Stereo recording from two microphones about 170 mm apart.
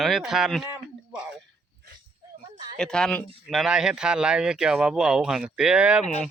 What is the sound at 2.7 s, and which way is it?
Speech, 5° left (ahead or behind).